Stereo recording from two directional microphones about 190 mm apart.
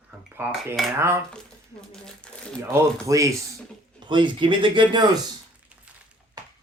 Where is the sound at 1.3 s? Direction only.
5° left (ahead or behind).